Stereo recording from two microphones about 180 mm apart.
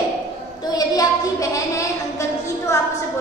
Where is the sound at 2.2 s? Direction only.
15° left (ahead or behind).